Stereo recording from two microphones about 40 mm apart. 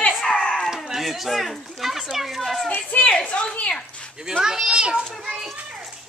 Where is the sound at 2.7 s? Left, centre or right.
Left.